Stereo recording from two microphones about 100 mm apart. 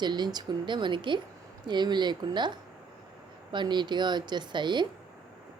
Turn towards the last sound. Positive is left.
turn(degrees=-50)  # may be behind; listen again after turning